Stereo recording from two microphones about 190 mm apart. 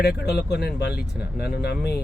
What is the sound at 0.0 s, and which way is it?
Speech, 60° left (ahead or behind).